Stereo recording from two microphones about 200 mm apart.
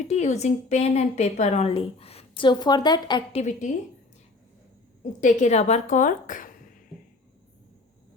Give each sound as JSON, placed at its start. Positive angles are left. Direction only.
{"t": 0.0, "sound": "a woman's voice", "side_deg": 35}
{"t": 5.2, "sound": "a woman's voice", "side_deg": 35}